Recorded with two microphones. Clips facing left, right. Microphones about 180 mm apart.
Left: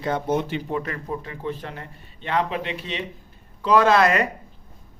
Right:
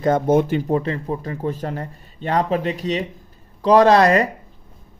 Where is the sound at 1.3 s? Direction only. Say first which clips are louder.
Right 6 dB; 40° right (ahead or behind).